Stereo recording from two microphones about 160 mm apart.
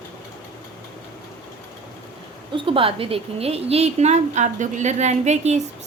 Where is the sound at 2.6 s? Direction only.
35° right (ahead or behind).